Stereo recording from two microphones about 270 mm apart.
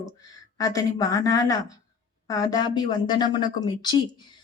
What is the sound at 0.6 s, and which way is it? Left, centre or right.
A woman's voice, centre.